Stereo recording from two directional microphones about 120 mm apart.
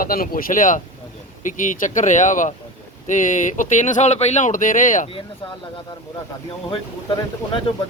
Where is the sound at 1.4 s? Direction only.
90° left.